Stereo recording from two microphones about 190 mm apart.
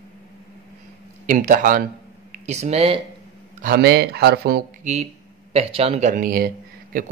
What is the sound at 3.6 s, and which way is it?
Speech, 55° right (ahead or behind).